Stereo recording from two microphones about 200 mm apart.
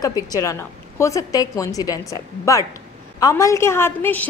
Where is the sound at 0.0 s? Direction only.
20° left (ahead or behind).